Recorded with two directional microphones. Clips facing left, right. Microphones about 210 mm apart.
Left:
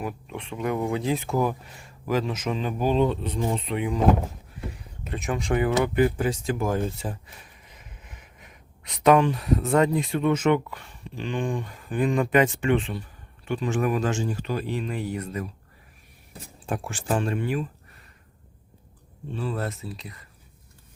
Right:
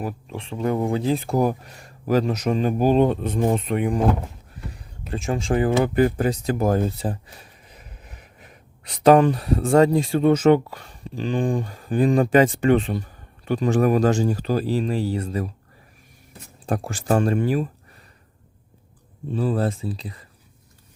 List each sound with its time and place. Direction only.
0.0 s speech: 35° right (ahead or behind); by 4.0 s 50° right (ahead or behind)
5.1 s speech: 30° right (ahead or behind)
16.6 s speech: 35° right (ahead or behind)
19.3 s speech: 40° right (ahead or behind)